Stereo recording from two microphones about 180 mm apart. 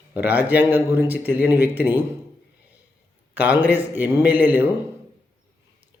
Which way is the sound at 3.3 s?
10° right (ahead or behind).